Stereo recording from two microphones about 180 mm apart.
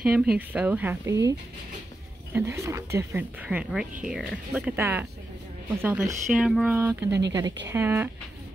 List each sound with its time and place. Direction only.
0.0 s speech: 5° right (ahead or behind)
2.3 s speech: 15° right (ahead or behind)
6.2 s speech: centre (ahead or behind)
7.1 s speech: 70° right (ahead or behind)
7.6 s speech: 15° right (ahead or behind)